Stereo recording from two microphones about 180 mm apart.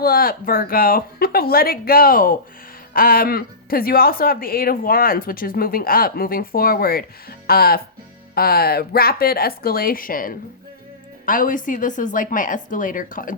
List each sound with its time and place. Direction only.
0.0 s speech: 55° left (ahead or behind)